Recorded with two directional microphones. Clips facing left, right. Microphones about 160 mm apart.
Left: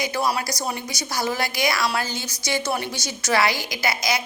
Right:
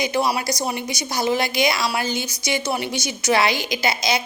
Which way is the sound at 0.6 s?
20° right (ahead or behind).